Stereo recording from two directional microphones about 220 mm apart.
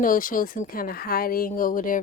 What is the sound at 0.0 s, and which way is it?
A woman's voice, 40° left (ahead or behind).